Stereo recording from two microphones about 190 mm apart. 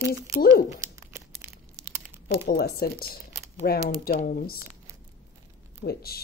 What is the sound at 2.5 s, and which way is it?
Speech, 55° left (ahead or behind).